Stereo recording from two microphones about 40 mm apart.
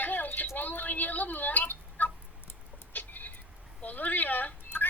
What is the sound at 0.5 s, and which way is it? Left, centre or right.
Tick-tock, left.